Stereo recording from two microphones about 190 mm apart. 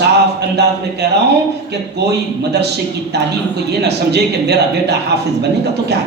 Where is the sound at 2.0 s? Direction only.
60° right (ahead or behind).